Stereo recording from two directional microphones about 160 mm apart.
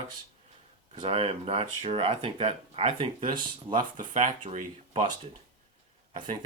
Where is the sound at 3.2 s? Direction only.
55° right (ahead or behind).